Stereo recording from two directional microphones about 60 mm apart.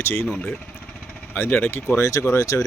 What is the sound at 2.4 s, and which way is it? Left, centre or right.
Speech, left.